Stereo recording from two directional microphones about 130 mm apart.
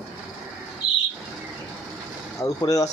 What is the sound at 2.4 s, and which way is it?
Speech, 25° left (ahead or behind).